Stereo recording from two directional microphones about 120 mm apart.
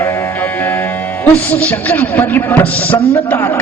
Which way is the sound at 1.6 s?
15° left (ahead or behind).